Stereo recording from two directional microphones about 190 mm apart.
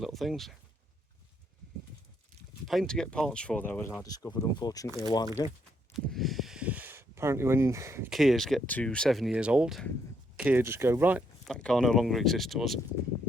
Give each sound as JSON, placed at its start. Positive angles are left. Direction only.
{"t": 0.0, "sound": "speech", "side_deg": 0}
{"t": 2.6, "sound": "speech", "side_deg": 0}
{"t": 5.9, "sound": "speech", "side_deg": 0}
{"t": 8.1, "sound": "speech", "side_deg": 0}
{"t": 11.4, "sound": "speech", "side_deg": 5}